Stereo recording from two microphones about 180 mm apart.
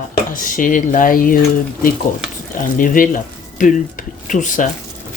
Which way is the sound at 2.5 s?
50° left (ahead or behind).